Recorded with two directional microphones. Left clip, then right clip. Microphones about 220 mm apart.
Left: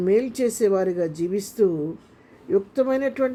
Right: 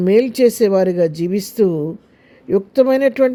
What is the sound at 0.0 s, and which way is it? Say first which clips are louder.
Speech: right 8 dB; 40° right (ahead or behind).